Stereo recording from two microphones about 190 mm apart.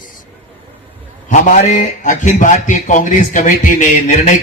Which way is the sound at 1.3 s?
40° left (ahead or behind).